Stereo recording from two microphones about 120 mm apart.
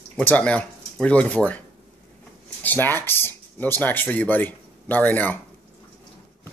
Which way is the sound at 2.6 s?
15° left (ahead or behind).